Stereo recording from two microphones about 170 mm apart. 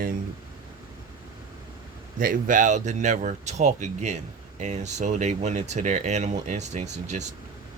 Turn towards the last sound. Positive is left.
turn(degrees=-40)  # may be behind; listen again after turning